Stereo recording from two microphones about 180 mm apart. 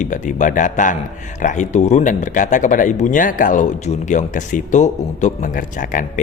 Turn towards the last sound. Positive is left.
turn(degrees=45)  # may be behind; listen again after turning